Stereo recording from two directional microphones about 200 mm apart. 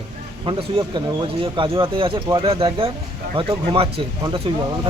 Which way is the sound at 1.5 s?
25° right (ahead or behind).